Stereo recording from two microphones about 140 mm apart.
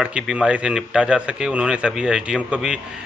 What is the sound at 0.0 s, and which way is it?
A man's voice, 5° right (ahead or behind).